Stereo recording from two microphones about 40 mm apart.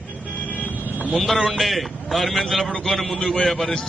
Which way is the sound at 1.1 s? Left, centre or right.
Centre.